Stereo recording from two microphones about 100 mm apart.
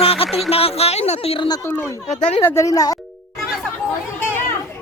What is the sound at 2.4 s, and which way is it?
Speech, 30° left (ahead or behind).